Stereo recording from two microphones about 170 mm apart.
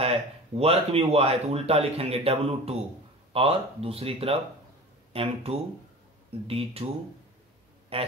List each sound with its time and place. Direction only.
0.0 s speech: 35° right (ahead or behind)
7.9 s speech: 35° right (ahead or behind)